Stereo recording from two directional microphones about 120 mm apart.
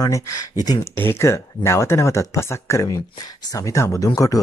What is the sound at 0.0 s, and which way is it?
Speech, 30° left (ahead or behind).